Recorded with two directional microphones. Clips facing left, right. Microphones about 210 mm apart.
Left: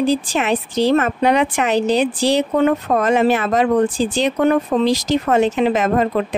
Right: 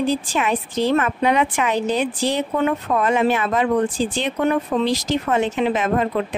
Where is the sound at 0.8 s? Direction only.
40° left (ahead or behind).